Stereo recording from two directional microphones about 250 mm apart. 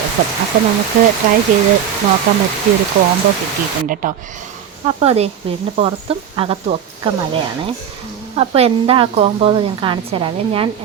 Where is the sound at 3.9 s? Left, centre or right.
Right.